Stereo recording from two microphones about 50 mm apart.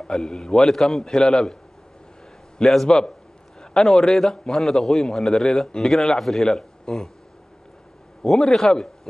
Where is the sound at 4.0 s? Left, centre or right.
Centre.